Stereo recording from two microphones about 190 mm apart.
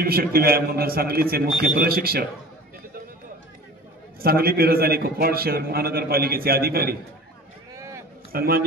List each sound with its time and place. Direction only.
0.0 s a man's voice: 50° right (ahead or behind)
4.2 s a man's voice: 55° right (ahead or behind)
7.7 s a sound: 15° right (ahead or behind)
8.3 s a man's voice: 50° right (ahead or behind)